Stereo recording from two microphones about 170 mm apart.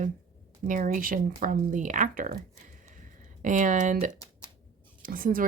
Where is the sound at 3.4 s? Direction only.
50° right (ahead or behind).